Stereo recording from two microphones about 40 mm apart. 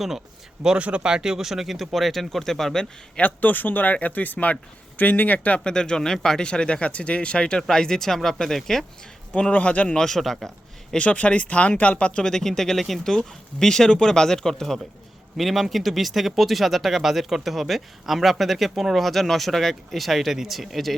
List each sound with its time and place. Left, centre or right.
0.8 s speech: right; by 2.8 s centre
3.2 s speech: left
5.5 s speech: left
6.4 s speech: left
7.7 s speech: centre
9.3 s speech: left
9.9 s speech: centre
10.9 s speech: left
12.2 s speech: centre
13.1 s speech: centre
15.4 s speech: centre